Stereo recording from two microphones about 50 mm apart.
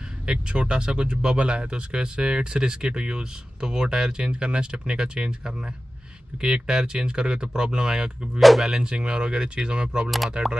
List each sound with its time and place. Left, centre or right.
0.3 s speech: centre
8.4 s speech: centre
8.6 s speech: centre
10.0 s speech: centre